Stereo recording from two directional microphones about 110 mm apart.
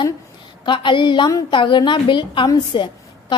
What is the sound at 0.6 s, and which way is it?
A woman's voice, 45° left (ahead or behind).